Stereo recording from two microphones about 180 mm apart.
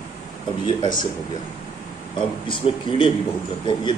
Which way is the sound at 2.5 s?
30° left (ahead or behind).